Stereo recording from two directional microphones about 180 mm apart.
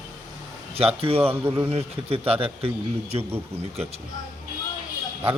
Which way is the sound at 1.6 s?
35° right (ahead or behind).